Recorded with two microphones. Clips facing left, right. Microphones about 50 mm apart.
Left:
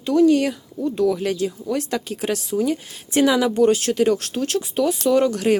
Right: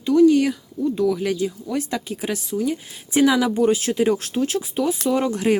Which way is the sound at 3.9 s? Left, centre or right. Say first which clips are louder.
Left 1 dB; centre.